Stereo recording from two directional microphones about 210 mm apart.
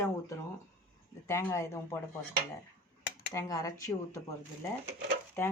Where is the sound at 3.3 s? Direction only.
15° left (ahead or behind).